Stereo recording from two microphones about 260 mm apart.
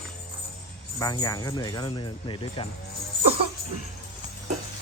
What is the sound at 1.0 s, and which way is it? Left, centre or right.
Speech, centre.